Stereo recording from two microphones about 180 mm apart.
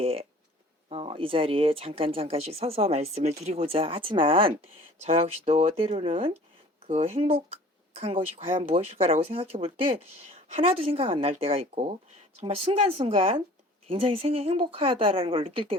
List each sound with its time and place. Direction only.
0.0 s speech: 35° right (ahead or behind)